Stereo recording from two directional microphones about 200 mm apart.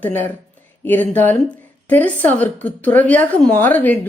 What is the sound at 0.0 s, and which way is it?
A woman's voice, 10° left (ahead or behind).